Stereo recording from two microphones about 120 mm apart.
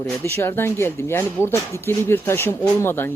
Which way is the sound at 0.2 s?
20° left (ahead or behind).